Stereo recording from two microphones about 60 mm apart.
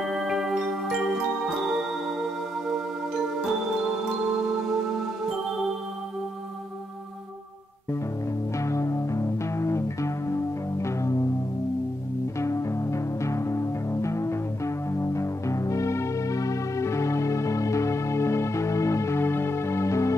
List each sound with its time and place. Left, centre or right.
0.0 s music: centre
8.5 s music: left
12.4 s music: left